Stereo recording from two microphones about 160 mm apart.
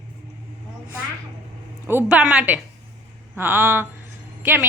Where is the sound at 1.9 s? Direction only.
10° right (ahead or behind).